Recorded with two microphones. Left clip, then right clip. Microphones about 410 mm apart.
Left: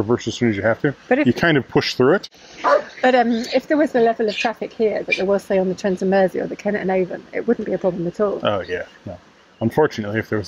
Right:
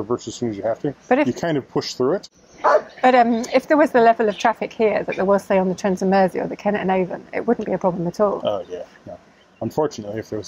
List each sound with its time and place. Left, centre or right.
0.1 s speech: left
1.0 s a woman's voice: centre
1.3 s speech: left
3.0 s a woman's voice: centre
9.6 s speech: left